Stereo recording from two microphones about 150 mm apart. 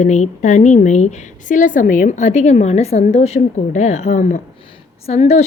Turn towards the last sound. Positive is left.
turn(degrees=45)  # may be behind; listen again after turning